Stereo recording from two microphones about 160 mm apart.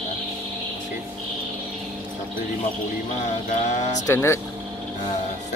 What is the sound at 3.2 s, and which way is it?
Music, 45° left (ahead or behind).